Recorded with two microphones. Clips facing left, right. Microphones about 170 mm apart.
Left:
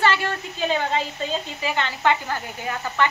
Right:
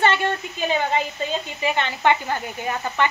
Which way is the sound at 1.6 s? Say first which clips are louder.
Right 3 dB; 20° right (ahead or behind).